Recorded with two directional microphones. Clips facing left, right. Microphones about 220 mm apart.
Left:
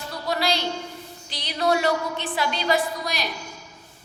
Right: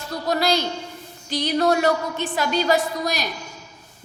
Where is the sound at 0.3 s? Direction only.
45° right (ahead or behind).